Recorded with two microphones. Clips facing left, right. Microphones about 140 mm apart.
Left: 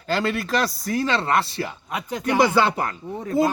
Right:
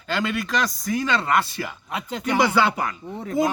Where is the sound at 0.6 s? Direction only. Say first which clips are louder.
Left 1 dB; centre (ahead or behind).